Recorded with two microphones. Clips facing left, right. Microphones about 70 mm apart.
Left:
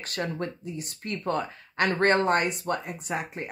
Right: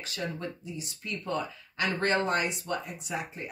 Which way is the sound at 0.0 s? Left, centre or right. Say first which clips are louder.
Left 4 dB; left.